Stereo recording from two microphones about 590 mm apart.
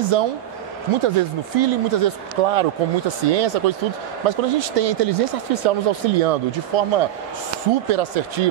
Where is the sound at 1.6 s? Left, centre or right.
Right.